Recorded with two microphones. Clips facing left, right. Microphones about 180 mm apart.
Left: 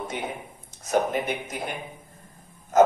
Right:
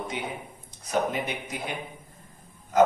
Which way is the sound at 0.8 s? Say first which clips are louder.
Left 3 dB; 45° left (ahead or behind).